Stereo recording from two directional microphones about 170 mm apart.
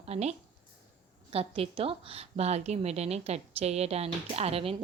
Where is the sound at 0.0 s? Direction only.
40° right (ahead or behind).